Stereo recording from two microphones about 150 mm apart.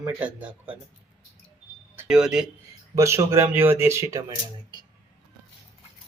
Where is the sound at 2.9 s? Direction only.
20° right (ahead or behind).